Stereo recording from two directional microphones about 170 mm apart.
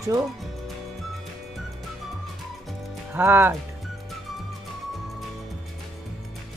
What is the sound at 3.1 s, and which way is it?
Speech, 10° right (ahead or behind).